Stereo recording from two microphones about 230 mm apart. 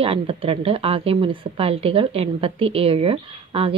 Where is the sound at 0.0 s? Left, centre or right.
Right.